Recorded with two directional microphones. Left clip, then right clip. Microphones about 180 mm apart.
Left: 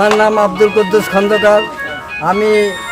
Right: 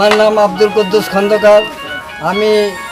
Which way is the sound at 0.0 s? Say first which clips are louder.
Right 1 dB; 15° left (ahead or behind).